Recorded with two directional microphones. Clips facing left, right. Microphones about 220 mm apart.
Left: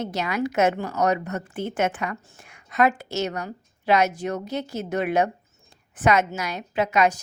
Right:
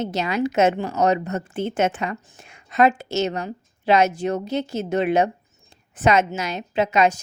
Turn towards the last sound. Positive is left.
turn(degrees=-25)  # may be behind; listen again after turning